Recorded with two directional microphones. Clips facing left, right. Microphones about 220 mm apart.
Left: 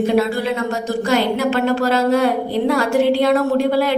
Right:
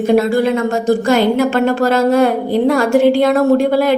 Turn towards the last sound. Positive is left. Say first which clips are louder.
# right 4 dB
turn(degrees=-45)  # may be behind; listen again after turning